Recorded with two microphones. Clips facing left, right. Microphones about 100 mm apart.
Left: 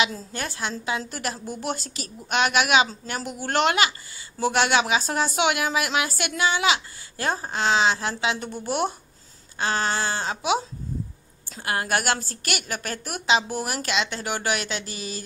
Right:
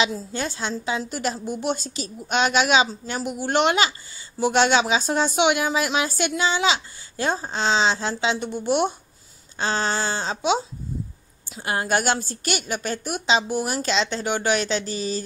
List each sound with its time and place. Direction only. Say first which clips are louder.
0.0 s speech: right 2 dB; 25° right (ahead or behind)
11.6 s speech: right 2 dB; 25° right (ahead or behind)